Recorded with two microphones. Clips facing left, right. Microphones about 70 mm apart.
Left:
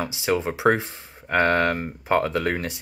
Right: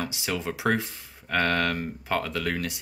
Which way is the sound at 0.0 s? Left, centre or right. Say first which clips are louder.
Left 6 dB; left.